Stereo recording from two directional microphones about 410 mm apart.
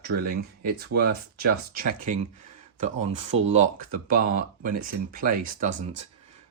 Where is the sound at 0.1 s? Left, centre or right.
Right.